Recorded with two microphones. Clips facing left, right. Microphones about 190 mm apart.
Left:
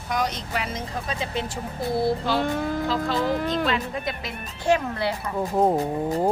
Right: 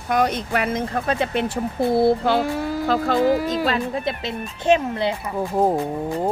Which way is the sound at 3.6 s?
35° right (ahead or behind).